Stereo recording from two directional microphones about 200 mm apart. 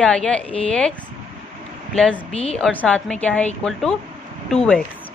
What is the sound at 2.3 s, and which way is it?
Speech, 30° left (ahead or behind).